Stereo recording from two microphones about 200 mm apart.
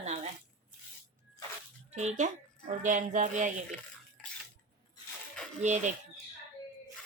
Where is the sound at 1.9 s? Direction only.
35° right (ahead or behind).